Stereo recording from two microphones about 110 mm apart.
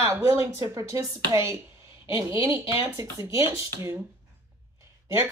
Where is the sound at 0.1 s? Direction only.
30° right (ahead or behind).